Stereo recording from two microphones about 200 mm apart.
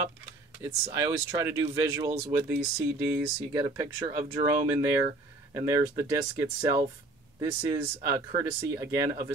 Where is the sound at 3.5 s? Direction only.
15° right (ahead or behind).